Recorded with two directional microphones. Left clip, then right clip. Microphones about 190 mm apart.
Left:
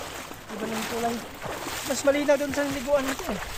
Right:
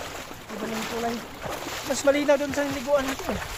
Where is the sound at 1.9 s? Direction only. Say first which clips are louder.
Right 1 dB; 5° right (ahead or behind); by 3.2 s 10° left (ahead or behind).